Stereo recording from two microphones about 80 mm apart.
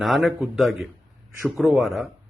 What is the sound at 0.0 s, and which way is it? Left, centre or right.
Speech, centre.